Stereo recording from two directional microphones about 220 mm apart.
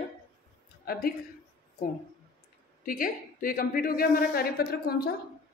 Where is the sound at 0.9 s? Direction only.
45° left (ahead or behind).